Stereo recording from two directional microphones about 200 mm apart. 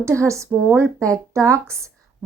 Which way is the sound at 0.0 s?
15° right (ahead or behind).